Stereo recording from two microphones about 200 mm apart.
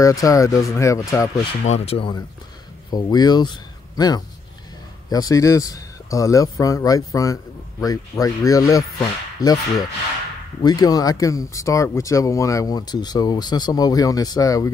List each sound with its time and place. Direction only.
0.0 s speech: 15° left (ahead or behind)
1.6 s speech: 35° left (ahead or behind); by 14.7 s 15° left (ahead or behind)